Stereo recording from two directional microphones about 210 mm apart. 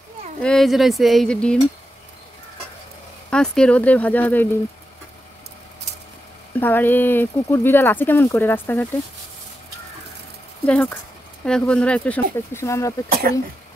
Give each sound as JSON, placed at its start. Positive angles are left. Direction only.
{"t": 0.4, "sound": "speech", "side_deg": 5}
{"t": 3.3, "sound": "speech", "side_deg": 5}
{"t": 6.5, "sound": "speech", "side_deg": 10}
{"t": 10.6, "sound": "speech", "side_deg": 5}